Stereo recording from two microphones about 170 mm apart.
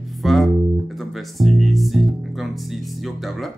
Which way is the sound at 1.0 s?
Centre (ahead or behind).